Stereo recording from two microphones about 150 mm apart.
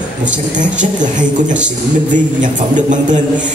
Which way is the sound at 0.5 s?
55° right (ahead or behind).